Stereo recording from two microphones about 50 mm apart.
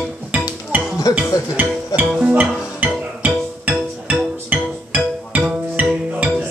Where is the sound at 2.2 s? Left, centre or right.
Right.